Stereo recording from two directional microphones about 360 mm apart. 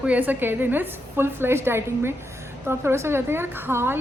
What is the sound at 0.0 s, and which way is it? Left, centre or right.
A woman's voice, centre.